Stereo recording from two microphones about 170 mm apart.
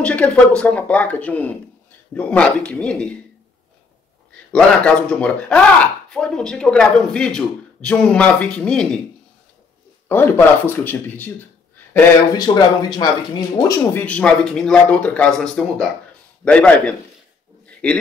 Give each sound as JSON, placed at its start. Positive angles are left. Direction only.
{"t": 0.0, "sound": "a man's voice", "side_deg": 5}
{"t": 4.5, "sound": "a man's voice", "side_deg": 5}
{"t": 10.0, "sound": "speech", "side_deg": 15}
{"t": 12.4, "sound": "speech", "side_deg": 25}
{"t": 14.0, "sound": "a man's voice", "side_deg": 5}